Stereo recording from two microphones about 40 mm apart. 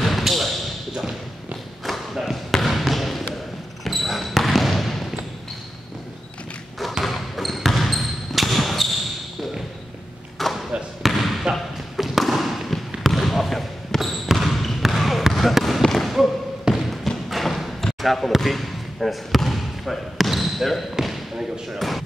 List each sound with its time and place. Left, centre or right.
0.0 s basketball bounce: centre
1.9 s a sound: centre
2.5 s basketball bounce: centre
7.1 s basketball bounce: centre
10.4 s basketball bounce: centre
14.2 s trickle: centre
14.8 s basketball bounce: centre
16.7 s trickle: centre
17.3 s a sound: centre
18.0 s basketball bounce: centre
21.6 s a sound: centre